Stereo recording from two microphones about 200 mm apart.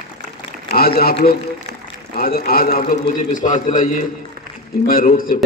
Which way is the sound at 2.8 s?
35° left (ahead or behind).